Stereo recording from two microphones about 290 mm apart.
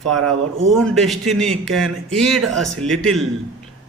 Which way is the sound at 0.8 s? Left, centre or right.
Centre.